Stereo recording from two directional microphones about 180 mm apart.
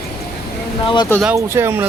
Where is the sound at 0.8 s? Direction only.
25° left (ahead or behind).